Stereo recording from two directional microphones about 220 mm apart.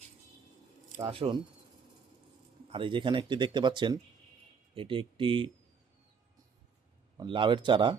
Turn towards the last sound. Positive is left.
turn(degrees=-20)  # may be behind; listen again after turning